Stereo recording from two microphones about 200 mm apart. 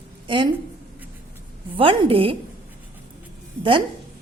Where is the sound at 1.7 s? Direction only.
25° right (ahead or behind).